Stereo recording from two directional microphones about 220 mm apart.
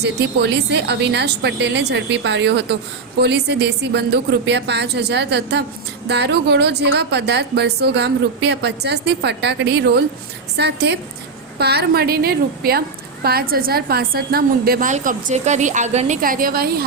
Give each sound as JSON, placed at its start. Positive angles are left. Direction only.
{"t": 0.0, "sound": "a woman's voice", "side_deg": -50}